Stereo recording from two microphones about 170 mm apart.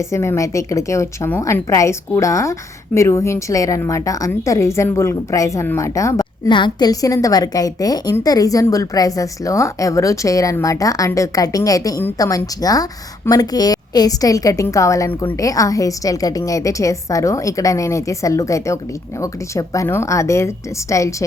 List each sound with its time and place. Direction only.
0.0 s a woman's voice: 15° left (ahead or behind)